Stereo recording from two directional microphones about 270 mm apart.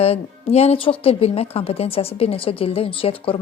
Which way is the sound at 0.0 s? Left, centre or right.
Left.